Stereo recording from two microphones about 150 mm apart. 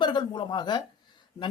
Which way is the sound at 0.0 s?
30° left (ahead or behind).